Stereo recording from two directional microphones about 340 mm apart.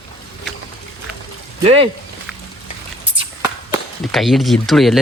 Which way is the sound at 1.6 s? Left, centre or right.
Centre.